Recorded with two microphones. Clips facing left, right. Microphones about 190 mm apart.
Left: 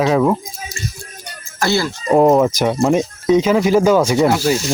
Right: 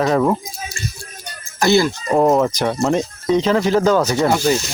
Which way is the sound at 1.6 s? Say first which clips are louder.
Right 3 dB; 20° right (ahead or behind).